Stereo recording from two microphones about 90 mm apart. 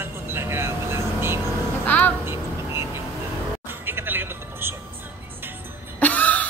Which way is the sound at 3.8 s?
25° right (ahead or behind).